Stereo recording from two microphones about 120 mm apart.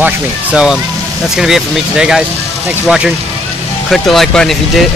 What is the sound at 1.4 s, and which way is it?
Speech, 5° right (ahead or behind).